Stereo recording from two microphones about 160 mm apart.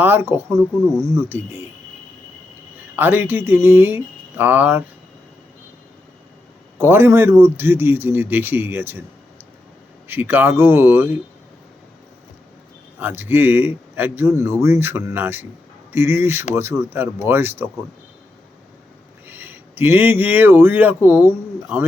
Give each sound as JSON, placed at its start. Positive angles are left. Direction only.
{"t": 0.0, "sound": "speech", "side_deg": -15}
{"t": 2.9, "sound": "speech", "side_deg": -10}
{"t": 6.7, "sound": "speech", "side_deg": -15}
{"t": 10.1, "sound": "speech", "side_deg": -10}
{"t": 13.0, "sound": "speech", "side_deg": -15}
{"t": 19.3, "sound": "speech", "side_deg": -15}